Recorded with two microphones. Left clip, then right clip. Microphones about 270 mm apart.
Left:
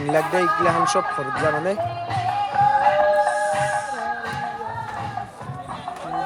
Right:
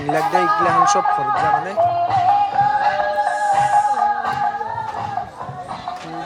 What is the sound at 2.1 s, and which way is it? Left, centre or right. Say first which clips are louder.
Music: right 7 dB; right.